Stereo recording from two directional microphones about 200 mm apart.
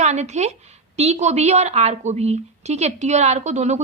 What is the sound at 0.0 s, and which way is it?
A woman's voice, 35° right (ahead or behind).